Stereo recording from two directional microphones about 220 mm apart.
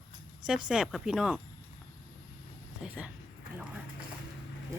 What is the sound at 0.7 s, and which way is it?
Speech, centre (ahead or behind).